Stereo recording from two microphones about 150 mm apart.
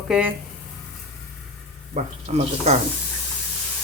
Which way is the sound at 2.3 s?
45° right (ahead or behind).